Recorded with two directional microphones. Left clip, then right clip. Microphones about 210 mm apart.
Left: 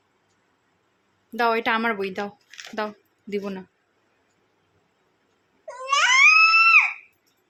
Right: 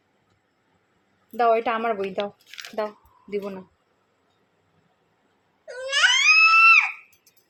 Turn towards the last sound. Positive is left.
turn(degrees=10)  # may be behind; listen again after turning